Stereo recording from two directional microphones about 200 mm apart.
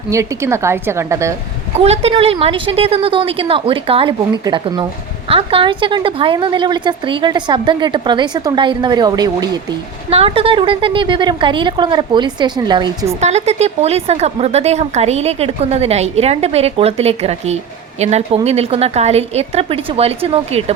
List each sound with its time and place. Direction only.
0.1 s a woman's voice: 15° right (ahead or behind)
1.7 s a woman's voice: 30° right (ahead or behind)
13.1 s speech: 35° right (ahead or behind)